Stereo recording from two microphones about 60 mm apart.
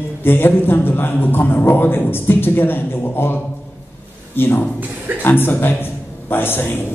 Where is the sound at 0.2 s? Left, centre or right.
Left.